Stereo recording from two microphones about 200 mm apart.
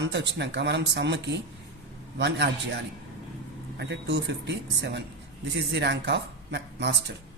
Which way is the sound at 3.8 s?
60° right (ahead or behind).